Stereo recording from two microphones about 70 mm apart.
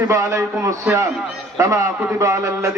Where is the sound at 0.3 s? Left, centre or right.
Right.